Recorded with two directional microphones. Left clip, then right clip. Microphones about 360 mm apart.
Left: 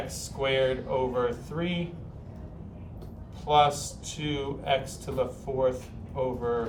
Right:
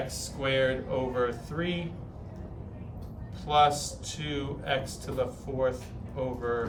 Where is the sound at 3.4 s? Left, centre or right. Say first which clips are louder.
Left 1 dB; centre.